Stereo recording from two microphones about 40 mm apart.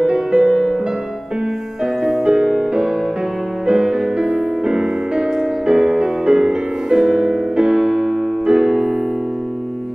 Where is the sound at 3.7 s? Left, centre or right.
Centre.